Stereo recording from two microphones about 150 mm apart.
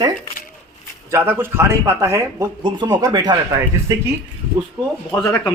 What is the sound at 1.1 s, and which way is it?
Speech, 15° right (ahead or behind).